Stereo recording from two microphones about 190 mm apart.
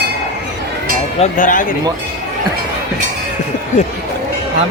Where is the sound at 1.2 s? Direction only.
45° left (ahead or behind).